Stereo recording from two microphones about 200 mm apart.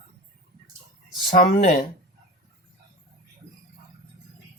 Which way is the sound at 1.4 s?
40° left (ahead or behind).